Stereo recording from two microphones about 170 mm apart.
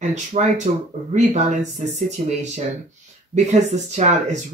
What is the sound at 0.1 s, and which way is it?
Speech, 45° right (ahead or behind).